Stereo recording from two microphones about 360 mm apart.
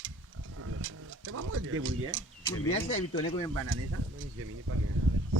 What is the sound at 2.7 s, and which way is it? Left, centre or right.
Speech, centre.